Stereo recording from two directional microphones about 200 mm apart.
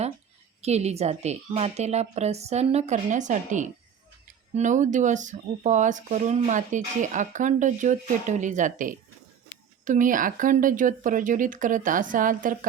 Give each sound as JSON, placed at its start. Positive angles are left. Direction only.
{"t": 0.6, "sound": "speech", "side_deg": -35}
{"t": 9.5, "sound": "a sound", "side_deg": 90}
{"t": 9.8, "sound": "speech", "side_deg": -40}